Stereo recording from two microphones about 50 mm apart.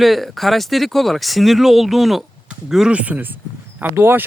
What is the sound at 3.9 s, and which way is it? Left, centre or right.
Speech, right.